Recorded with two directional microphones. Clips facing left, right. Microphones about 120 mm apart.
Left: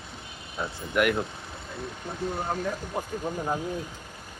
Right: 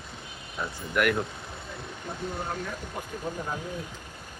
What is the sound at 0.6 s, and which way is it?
Speech, 20° left (ahead or behind).